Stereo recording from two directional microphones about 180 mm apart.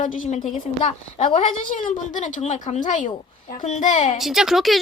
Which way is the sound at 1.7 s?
45° left (ahead or behind).